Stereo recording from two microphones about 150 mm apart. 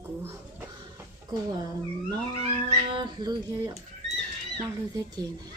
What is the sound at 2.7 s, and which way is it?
A woman's voice, 30° right (ahead or behind).